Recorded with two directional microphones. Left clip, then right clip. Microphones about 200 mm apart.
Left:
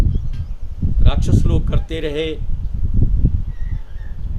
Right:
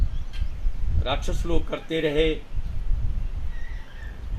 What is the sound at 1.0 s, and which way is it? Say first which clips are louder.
Speech: left 3 dB; 20° left (ahead or behind).